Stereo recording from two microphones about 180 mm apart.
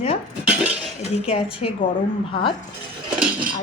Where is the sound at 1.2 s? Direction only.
30° left (ahead or behind).